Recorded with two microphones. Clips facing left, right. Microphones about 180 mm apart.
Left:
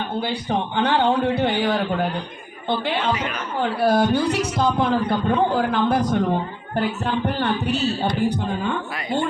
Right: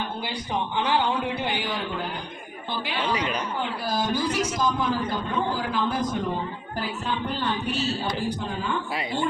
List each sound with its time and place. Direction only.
0.8 s a man's voice: 65° left (ahead or behind)
3.8 s a man's voice: 65° left (ahead or behind)